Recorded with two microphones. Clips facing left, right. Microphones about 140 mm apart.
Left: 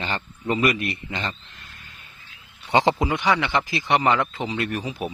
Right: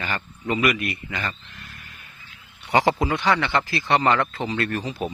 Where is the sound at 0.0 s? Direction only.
25° left (ahead or behind).